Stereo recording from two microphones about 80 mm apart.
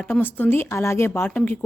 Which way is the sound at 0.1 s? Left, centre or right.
Left.